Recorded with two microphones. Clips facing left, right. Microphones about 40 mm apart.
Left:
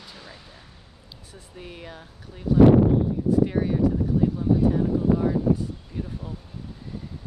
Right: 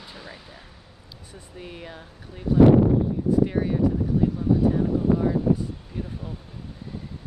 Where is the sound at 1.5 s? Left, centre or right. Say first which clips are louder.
Right 1 dB; centre.